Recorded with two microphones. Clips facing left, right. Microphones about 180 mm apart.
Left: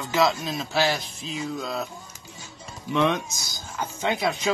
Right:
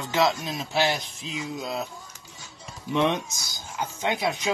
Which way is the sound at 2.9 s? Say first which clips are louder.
Left 1 dB; 20° right (ahead or behind).